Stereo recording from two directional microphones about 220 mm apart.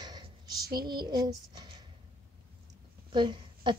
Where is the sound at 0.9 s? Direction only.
20° right (ahead or behind).